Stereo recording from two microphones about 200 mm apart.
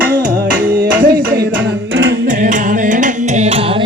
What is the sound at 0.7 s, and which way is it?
Music, 45° right (ahead or behind).